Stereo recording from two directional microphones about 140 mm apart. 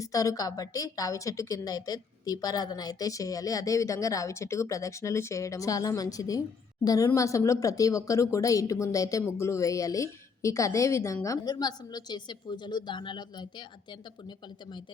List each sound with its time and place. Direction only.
0.0 s speech: 25° left (ahead or behind)